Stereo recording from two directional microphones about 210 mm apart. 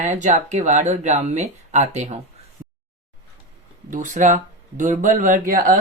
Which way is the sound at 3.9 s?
35° right (ahead or behind).